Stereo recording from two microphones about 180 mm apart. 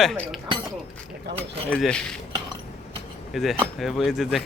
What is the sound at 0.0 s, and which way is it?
Speech, centre (ahead or behind).